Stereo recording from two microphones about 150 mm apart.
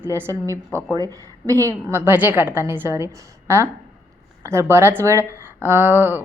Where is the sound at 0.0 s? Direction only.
15° right (ahead or behind).